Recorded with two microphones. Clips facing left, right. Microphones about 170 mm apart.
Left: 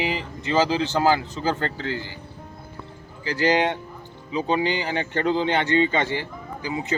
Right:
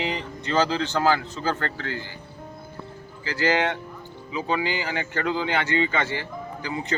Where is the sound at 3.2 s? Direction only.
15° left (ahead or behind).